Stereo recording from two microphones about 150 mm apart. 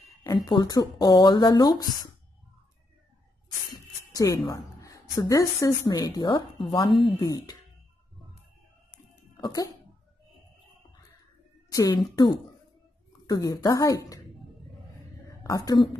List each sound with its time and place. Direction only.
0.5 s speech: 25° left (ahead or behind)
4.1 s a woman's voice: 25° left (ahead or behind)
9.1 s a sound: 25° left (ahead or behind)
11.7 s a woman's voice: 20° left (ahead or behind)
13.3 s speech: 25° left (ahead or behind)
15.4 s a woman's voice: 25° left (ahead or behind)